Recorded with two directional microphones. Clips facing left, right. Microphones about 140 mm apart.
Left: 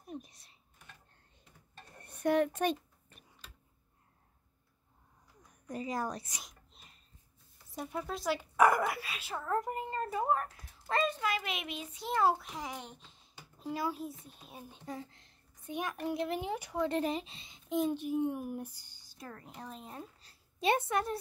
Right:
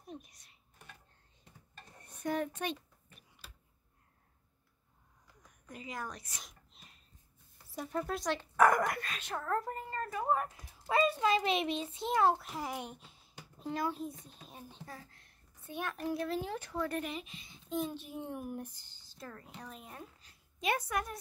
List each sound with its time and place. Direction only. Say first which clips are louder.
0.2 s a sound: left 7 dB; 30° left (ahead or behind)
2.0 s a sound: left 6 dB; 70° left (ahead or behind)
2.5 s a child's voice: left 6 dB; 45° left (ahead or behind)
5.7 s a woman's voice: left 7 dB; 40° left (ahead or behind)
6.4 s a sound: left 1 dB; centre (ahead or behind)
7.7 s speech: right 1 dB; 15° left (ahead or behind)
8.0 s speech: left 1 dB; 5° left (ahead or behind)
9.6 s a woman's voice: left 3 dB; 20° left (ahead or behind)
10.3 s speech: even; 10° right (ahead or behind)
11.1 s a child's voice: right 6 dB; 25° right (ahead or behind)
12.2 s a child's voice: even; centre (ahead or behind)
14.9 s a woman's voice: left 7 dB; 20° left (ahead or behind)
17.0 s a woman's voice: left 7 dB; 35° left (ahead or behind)
17.5 s a child's voice: left 5 dB; 15° left (ahead or behind)